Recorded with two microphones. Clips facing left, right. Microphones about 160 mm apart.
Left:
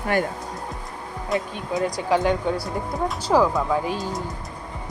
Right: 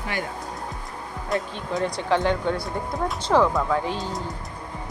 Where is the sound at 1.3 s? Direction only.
Centre (ahead or behind).